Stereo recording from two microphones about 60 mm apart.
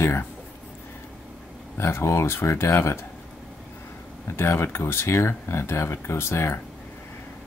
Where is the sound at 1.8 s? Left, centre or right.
Left.